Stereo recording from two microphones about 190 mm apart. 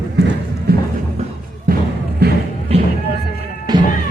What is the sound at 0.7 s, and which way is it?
Music, 55° right (ahead or behind).